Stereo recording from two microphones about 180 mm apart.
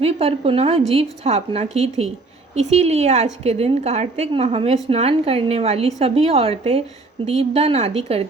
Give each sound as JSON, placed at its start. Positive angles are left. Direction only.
{"t": 0.0, "sound": "a woman's voice", "side_deg": -35}